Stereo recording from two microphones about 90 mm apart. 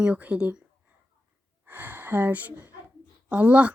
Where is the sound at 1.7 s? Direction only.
20° right (ahead or behind).